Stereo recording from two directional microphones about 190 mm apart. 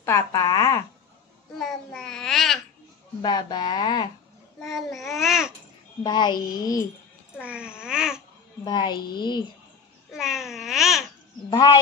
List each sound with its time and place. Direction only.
0.0 s speech: 15° left (ahead or behind)
1.6 s babbling: centre (ahead or behind)
3.2 s speech: 25° left (ahead or behind)
4.6 s a child's voice: centre (ahead or behind)
6.0 s speech: 25° left (ahead or behind)
7.3 s babbling: 5° right (ahead or behind)
8.6 s speech: 20° left (ahead or behind)
10.1 s babbling: centre (ahead or behind)
11.5 s speech: 25° left (ahead or behind)